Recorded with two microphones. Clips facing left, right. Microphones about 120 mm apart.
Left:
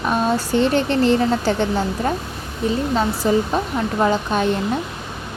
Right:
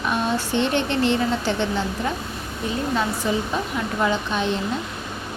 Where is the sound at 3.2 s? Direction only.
40° left (ahead or behind).